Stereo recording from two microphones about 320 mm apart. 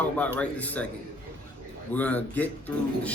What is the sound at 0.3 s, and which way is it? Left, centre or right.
Speech, centre.